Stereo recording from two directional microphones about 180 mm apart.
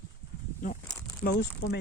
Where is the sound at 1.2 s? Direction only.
60° left (ahead or behind).